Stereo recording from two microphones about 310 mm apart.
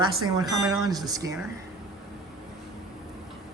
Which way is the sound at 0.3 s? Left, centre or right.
Centre.